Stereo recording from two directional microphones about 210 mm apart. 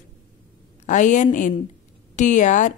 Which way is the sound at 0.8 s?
35° left (ahead or behind).